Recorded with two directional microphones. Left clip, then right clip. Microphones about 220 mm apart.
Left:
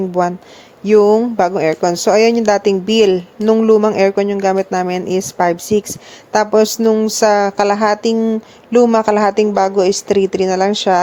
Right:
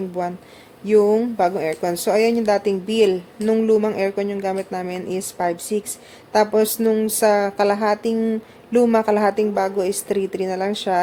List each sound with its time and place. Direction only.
0.2 s speech: 25° left (ahead or behind)